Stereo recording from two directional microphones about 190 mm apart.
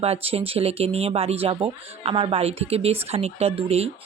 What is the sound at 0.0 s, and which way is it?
Speech, 30° right (ahead or behind).